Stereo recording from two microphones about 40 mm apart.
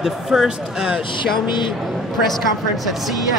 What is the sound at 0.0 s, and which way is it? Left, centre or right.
Speech, centre.